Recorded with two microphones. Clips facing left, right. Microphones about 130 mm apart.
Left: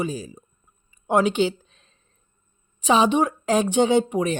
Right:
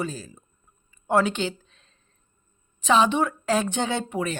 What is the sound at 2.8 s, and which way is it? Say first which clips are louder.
Speech: left 2 dB; 15° left (ahead or behind).